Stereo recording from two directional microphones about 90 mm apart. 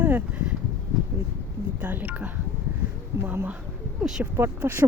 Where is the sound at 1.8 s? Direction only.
20° right (ahead or behind).